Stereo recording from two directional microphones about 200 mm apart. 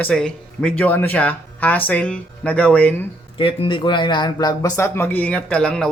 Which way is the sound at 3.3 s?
25° left (ahead or behind).